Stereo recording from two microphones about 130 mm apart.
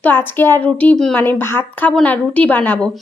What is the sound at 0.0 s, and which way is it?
A woman's voice, 15° left (ahead or behind).